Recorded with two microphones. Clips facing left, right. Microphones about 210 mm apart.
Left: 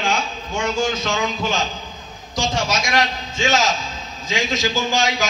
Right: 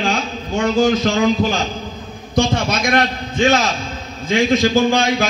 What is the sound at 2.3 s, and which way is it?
A man's voice, 60° right (ahead or behind).